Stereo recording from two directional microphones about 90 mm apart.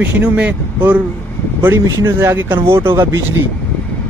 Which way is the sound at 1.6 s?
30° right (ahead or behind).